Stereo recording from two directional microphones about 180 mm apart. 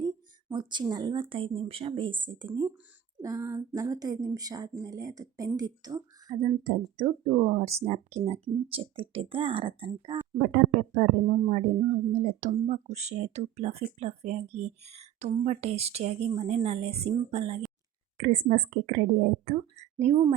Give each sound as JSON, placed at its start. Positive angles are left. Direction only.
{"t": 0.0, "sound": "speech", "side_deg": -25}
{"t": 3.2, "sound": "female singing", "side_deg": -15}
{"t": 3.8, "sound": "speech", "side_deg": -20}
{"t": 6.3, "sound": "speech", "side_deg": -40}
{"t": 10.4, "sound": "speech", "side_deg": -50}
{"t": 18.2, "sound": "a woman's voice", "side_deg": -45}